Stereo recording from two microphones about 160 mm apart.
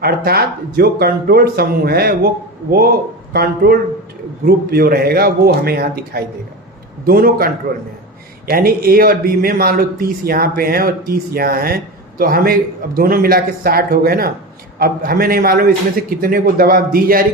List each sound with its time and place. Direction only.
0.0 s a man's voice: 75° right (ahead or behind)